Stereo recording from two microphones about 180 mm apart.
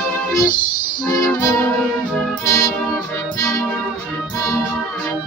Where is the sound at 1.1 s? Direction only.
15° left (ahead or behind).